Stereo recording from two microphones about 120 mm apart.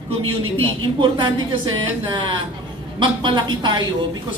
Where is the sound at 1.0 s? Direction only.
40° right (ahead or behind).